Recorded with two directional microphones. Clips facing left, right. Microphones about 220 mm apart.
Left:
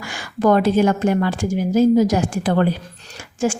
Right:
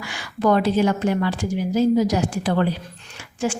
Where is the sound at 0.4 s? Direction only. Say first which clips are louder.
Left 3 dB; 50° left (ahead or behind).